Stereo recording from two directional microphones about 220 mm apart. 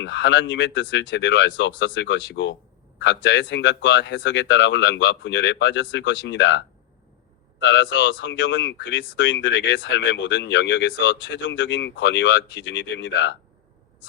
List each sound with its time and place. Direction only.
0.0 s speech: 55° left (ahead or behind)